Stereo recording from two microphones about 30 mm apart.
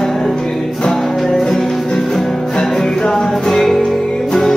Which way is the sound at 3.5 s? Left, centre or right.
Centre.